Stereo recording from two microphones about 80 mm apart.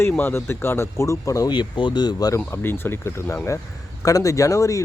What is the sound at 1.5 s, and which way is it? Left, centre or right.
Speech, left.